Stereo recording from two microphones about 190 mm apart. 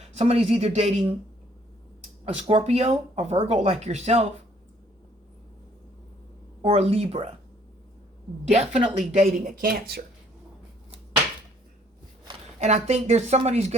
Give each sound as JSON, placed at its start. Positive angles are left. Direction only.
{"t": 0.2, "sound": "speech", "side_deg": -35}
{"t": 2.2, "sound": "speech", "side_deg": -30}
{"t": 6.6, "sound": "speech", "side_deg": -30}
{"t": 8.4, "sound": "speech", "side_deg": -35}
{"t": 12.5, "sound": "speech", "side_deg": -35}